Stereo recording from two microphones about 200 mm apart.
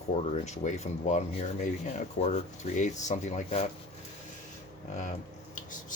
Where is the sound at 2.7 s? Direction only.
35° left (ahead or behind).